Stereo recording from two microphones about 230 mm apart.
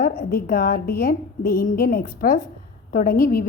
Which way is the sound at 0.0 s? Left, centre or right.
Left.